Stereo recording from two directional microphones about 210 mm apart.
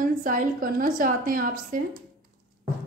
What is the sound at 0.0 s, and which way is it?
A woman's voice, 40° right (ahead or behind).